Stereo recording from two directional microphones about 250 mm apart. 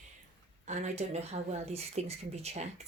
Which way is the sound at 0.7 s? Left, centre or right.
Right.